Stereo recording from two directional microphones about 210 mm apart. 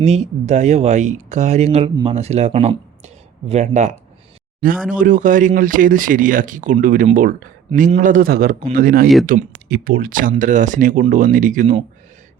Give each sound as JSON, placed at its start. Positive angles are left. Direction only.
{"t": 0.0, "sound": "speech", "side_deg": -30}
{"t": 7.7, "sound": "a man's voice", "side_deg": -30}
{"t": 7.9, "sound": "a man's voice", "side_deg": -40}